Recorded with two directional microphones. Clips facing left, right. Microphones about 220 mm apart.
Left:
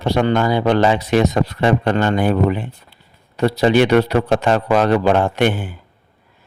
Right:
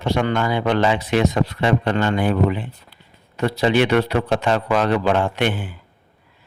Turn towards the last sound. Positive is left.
turn(degrees=45)  # may be behind; listen again after turning